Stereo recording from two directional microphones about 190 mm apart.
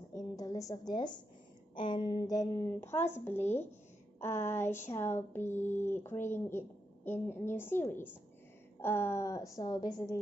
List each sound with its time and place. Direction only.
0.1 s a woman's voice: 20° left (ahead or behind)